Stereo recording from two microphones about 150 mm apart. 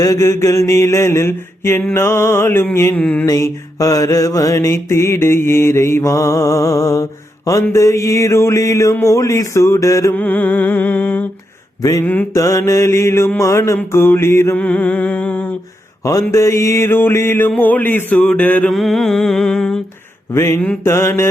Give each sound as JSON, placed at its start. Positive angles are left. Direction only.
{"t": 0.0, "sound": "mantra", "side_deg": 20}
{"t": 3.2, "sound": "mantra", "side_deg": 20}
{"t": 20.3, "sound": "mantra", "side_deg": 15}